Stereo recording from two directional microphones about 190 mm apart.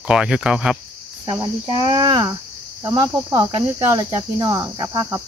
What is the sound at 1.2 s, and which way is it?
Cricket, 20° right (ahead or behind).